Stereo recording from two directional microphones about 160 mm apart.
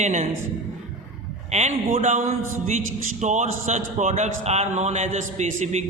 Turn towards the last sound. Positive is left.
turn(degrees=-45)  # may be behind; listen again after turning